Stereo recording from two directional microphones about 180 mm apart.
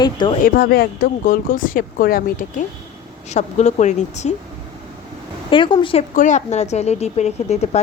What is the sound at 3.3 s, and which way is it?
Speech, 40° left (ahead or behind).